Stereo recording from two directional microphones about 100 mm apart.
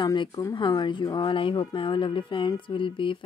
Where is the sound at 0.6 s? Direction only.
55° left (ahead or behind).